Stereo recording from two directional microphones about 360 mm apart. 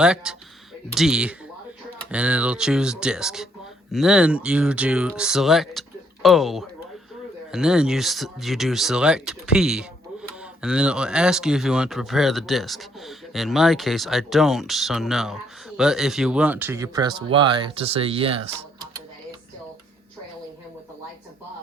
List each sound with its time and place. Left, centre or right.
0.0 s speech: centre